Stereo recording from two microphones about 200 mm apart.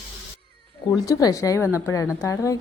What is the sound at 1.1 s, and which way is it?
Speech, 20° left (ahead or behind).